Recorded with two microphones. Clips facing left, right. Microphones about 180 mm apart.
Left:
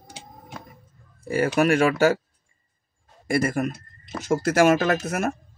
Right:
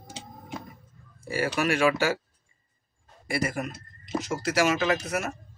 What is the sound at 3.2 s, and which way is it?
Speech, 50° left (ahead or behind).